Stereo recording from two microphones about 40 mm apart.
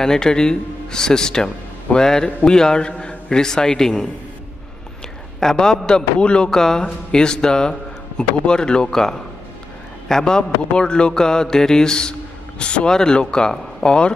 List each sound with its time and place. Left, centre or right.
0.0 s a man's voice: centre
2.2 s mantra: centre
2.9 s a man's voice: left
5.4 s a man's voice: centre
5.9 s mantra: left
8.9 s a man's voice: centre
10.0 s mantra: centre